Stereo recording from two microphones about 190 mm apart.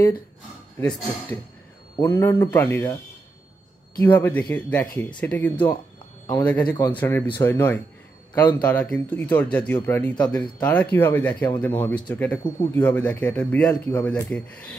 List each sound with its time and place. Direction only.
0.7 s speech: 10° left (ahead or behind)
4.0 s speech: 10° left (ahead or behind)